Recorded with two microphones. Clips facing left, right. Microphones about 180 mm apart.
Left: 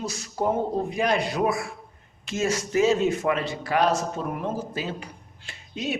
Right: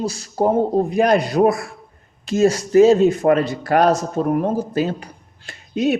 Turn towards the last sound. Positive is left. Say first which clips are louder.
# right 11 dB
turn(degrees=-45)  # may be behind; listen again after turning